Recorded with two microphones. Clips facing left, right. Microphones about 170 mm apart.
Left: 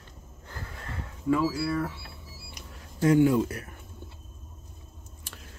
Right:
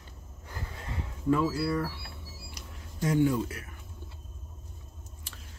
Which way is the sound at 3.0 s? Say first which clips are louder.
Left 5 dB; 65° left (ahead or behind).